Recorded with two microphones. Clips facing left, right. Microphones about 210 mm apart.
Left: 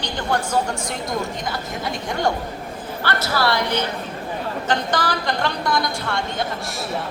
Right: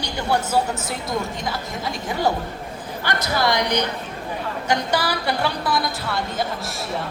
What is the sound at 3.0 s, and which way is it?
A woman's voice, 15° right (ahead or behind).